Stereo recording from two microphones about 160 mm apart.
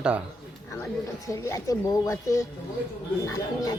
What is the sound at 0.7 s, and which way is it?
Speech, 15° left (ahead or behind).